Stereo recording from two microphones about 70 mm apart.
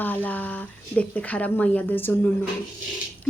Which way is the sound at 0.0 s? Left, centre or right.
Left.